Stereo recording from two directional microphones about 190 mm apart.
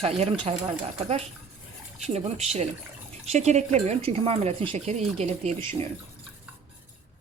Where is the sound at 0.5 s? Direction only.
35° right (ahead or behind).